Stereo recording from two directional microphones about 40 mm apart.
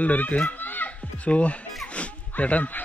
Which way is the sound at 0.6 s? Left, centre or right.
Left.